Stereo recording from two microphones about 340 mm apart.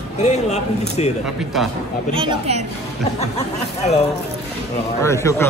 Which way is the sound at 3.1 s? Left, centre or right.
Centre.